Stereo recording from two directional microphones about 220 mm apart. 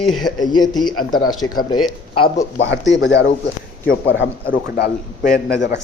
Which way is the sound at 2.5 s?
55° left (ahead or behind).